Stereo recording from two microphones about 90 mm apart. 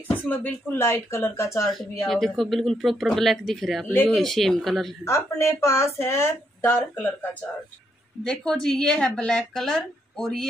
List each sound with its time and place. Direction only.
0.3 s speech: 20° left (ahead or behind)
2.0 s speech: 5° left (ahead or behind)
5.0 s speech: 30° left (ahead or behind)
8.2 s speech: 5° left (ahead or behind)